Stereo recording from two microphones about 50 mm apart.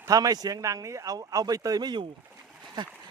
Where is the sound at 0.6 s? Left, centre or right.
Right.